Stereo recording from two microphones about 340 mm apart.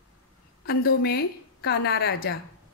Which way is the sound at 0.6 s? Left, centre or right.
Left.